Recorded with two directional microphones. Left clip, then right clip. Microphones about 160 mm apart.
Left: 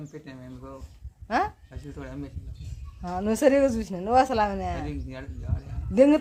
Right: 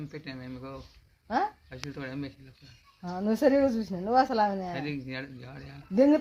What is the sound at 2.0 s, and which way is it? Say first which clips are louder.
Speech: even; 25° right (ahead or behind).